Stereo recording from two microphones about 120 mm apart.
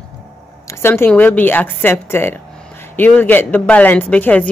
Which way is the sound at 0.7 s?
20° left (ahead or behind).